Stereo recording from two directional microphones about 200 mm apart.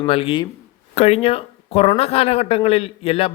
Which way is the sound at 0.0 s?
25° left (ahead or behind).